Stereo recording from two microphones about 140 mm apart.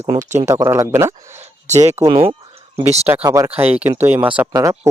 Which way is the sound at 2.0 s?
40° right (ahead or behind).